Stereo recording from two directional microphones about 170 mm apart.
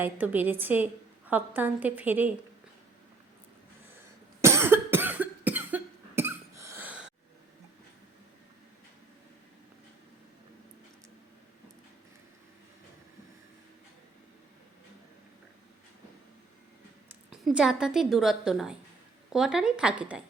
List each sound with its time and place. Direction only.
0.0 s a woman's voice: 10° right (ahead or behind)
4.4 s cough: 15° right (ahead or behind)
17.2 s a woman's voice: 5° right (ahead or behind)